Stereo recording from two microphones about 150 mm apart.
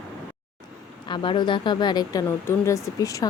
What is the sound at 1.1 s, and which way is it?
A woman's voice, 30° left (ahead or behind).